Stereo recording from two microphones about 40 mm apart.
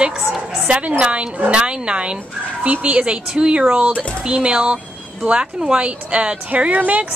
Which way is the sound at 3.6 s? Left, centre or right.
Right.